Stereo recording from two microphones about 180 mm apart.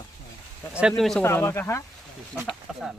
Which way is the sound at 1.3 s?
10° left (ahead or behind).